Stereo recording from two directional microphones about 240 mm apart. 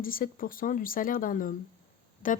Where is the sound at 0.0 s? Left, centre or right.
Left.